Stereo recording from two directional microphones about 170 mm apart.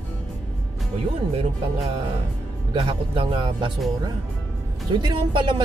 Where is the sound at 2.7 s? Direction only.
35° right (ahead or behind).